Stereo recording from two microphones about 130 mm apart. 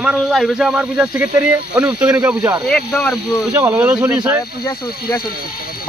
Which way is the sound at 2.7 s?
5° left (ahead or behind).